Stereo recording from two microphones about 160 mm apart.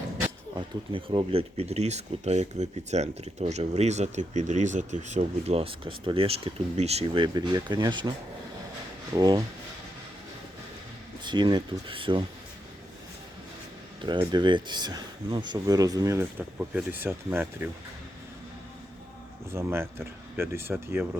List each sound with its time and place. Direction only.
0.9 s speech: 35° right (ahead or behind)
9.1 s speech: 25° right (ahead or behind)
11.2 s speech: 30° right (ahead or behind)
14.0 s speech: 30° right (ahead or behind); by 17.7 s 10° right (ahead or behind)
19.5 s speech: 15° right (ahead or behind)